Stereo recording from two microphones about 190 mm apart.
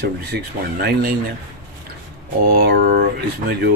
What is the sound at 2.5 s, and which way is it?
Speech, 55° right (ahead or behind).